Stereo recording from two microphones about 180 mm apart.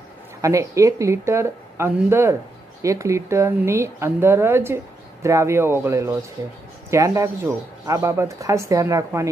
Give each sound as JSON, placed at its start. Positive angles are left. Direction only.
{"t": 0.4, "sound": "speech", "side_deg": -15}